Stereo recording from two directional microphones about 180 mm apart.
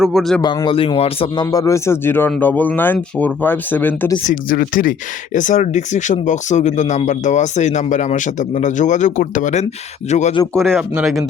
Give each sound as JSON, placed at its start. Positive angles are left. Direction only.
{"t": 0.0, "sound": "a man's voice", "side_deg": 0}
{"t": 0.4, "sound": "a man's voice", "side_deg": 25}
{"t": 1.5, "sound": "speech", "side_deg": 20}
{"t": 4.2, "sound": "speech", "side_deg": 50}
{"t": 10.6, "sound": "a man's voice", "side_deg": 0}